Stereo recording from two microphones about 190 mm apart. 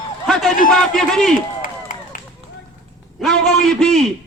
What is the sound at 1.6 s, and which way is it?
Run, 45° left (ahead or behind).